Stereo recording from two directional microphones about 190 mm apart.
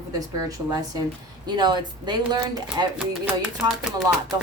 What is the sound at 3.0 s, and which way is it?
Speech, 5° right (ahead or behind).